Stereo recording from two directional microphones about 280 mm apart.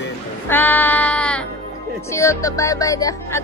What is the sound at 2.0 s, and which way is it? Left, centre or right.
Speech, centre.